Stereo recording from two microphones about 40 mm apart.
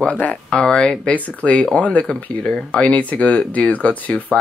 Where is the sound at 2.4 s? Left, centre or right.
Centre.